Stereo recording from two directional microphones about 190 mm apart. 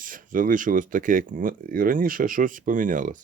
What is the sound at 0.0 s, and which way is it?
Speech, 45° right (ahead or behind).